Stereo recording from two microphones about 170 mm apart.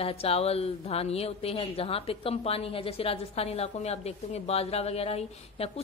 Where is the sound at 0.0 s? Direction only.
35° left (ahead or behind).